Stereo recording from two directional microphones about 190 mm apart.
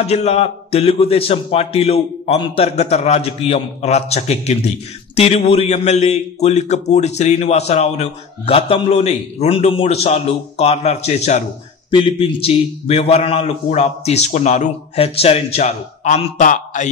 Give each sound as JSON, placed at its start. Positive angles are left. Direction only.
{"t": 0.0, "sound": "a man's voice", "side_deg": 35}